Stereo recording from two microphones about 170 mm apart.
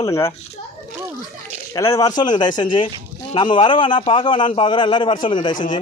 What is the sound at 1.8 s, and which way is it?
A man's voice, 20° left (ahead or behind).